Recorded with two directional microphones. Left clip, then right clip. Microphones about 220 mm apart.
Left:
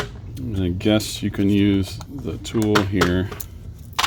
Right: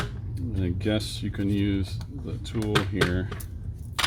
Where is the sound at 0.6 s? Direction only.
40° left (ahead or behind).